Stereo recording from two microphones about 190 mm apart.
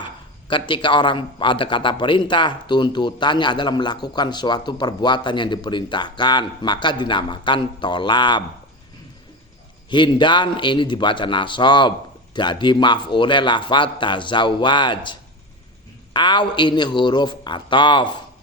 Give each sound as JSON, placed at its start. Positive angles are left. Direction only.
{"t": 0.0, "sound": "a sound", "side_deg": 25}
{"t": 0.7, "sound": "a man's voice", "side_deg": 25}
{"t": 9.9, "sound": "a man's voice", "side_deg": 25}